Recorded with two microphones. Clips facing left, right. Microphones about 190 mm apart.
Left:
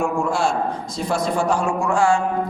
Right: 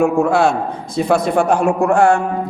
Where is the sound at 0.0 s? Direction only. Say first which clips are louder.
Right 7 dB; 65° right (ahead or behind).